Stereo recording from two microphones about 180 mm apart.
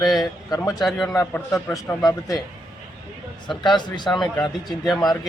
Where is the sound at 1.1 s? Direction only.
15° left (ahead or behind).